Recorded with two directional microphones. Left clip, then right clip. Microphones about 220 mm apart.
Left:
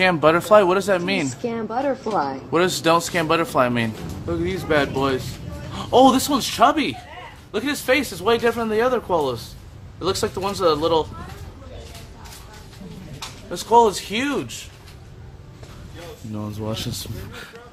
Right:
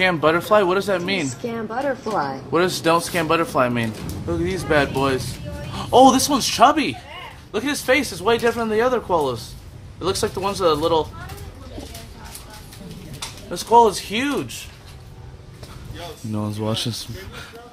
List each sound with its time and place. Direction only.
0.0 s speech: 10° left (ahead or behind)
2.5 s speech: 5° left (ahead or behind)
13.5 s speech: centre (ahead or behind)
16.3 s speech: 20° right (ahead or behind)